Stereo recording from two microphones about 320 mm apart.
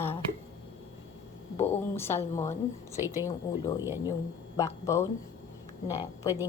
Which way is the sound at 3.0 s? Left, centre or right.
Centre.